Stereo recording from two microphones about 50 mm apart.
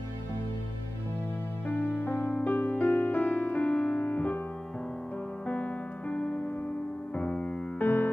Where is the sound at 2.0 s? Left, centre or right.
Left.